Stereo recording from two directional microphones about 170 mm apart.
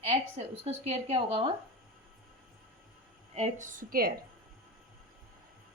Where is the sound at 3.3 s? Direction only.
45° right (ahead or behind).